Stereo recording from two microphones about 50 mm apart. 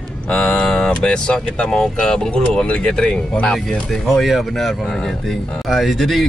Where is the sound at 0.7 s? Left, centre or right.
Centre.